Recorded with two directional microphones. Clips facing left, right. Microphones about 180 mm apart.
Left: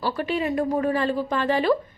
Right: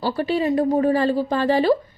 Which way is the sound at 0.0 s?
30° right (ahead or behind).